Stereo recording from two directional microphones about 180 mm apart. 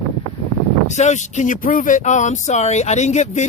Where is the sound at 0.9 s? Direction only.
40° left (ahead or behind).